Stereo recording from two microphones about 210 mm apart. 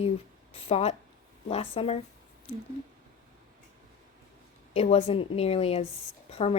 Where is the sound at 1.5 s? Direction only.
25° left (ahead or behind).